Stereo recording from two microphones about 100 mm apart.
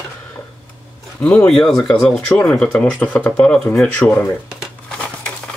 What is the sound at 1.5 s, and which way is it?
Speech, 5° left (ahead or behind).